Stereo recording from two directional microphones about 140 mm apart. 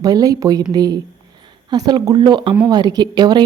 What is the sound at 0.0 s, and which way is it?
A woman's voice, 25° right (ahead or behind).